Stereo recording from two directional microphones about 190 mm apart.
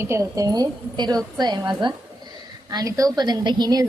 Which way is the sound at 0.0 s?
15° right (ahead or behind).